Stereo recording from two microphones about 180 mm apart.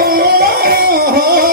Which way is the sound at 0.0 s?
55° right (ahead or behind).